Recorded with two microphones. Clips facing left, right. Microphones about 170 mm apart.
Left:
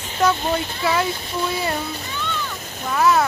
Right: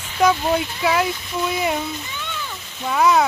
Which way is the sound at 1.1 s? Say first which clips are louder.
Even; 30° left (ahead or behind).